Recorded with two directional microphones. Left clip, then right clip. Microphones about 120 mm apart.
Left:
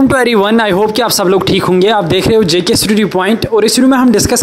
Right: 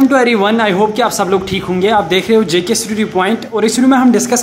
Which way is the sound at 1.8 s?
65° left (ahead or behind).